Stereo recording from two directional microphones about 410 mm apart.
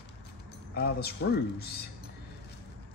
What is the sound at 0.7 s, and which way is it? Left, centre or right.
Speech, left.